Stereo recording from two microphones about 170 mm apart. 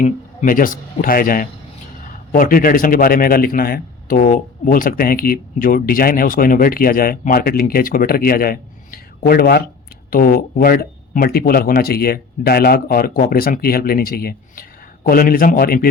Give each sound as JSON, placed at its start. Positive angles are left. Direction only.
{"t": 0.0, "sound": "a man's voice", "side_deg": 50}